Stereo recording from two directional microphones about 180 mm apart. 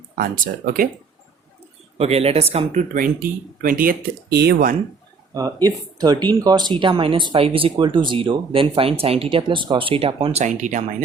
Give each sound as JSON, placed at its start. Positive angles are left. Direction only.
{"t": 0.2, "sound": "speech", "side_deg": -50}
{"t": 2.0, "sound": "speech", "side_deg": -35}
{"t": 2.9, "sound": "speech", "side_deg": -50}
{"t": 5.6, "sound": "speech", "side_deg": -20}